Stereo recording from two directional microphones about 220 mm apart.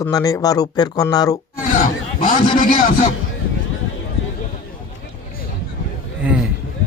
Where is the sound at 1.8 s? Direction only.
40° left (ahead or behind).